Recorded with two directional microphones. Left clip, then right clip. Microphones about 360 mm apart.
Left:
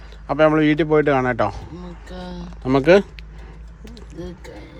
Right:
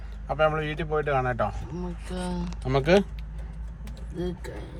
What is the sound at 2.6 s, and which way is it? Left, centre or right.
Speech, left.